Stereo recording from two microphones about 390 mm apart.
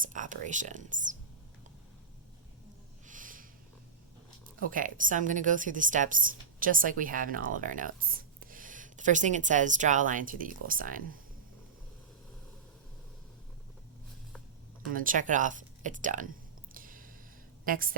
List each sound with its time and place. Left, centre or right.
0.0 s a woman's voice: centre
3.1 s a sound: centre
4.7 s a woman's voice: centre
14.9 s a woman's voice: right
16.7 s a sound: right
17.7 s a woman's voice: right